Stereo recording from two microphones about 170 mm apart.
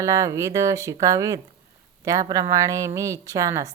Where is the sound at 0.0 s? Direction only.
20° right (ahead or behind).